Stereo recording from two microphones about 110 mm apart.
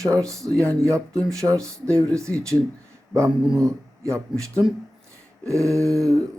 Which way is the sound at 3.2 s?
5° right (ahead or behind).